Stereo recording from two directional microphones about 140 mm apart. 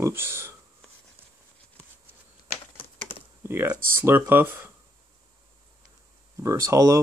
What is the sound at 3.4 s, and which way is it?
Speech, 15° right (ahead or behind).